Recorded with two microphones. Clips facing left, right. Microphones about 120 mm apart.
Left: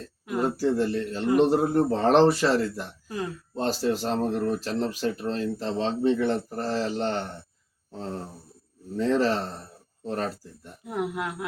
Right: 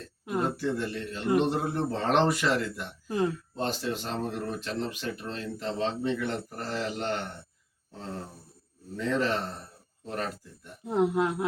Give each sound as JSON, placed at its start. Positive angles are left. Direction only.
{"t": 0.5, "sound": "speech", "side_deg": 35}
{"t": 10.8, "sound": "speech", "side_deg": -25}